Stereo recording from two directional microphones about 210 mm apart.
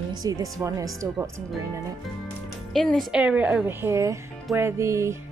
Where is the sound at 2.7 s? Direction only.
Centre (ahead or behind); by 5.2 s 15° right (ahead or behind).